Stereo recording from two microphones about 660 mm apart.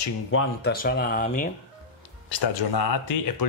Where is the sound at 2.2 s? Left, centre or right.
Left.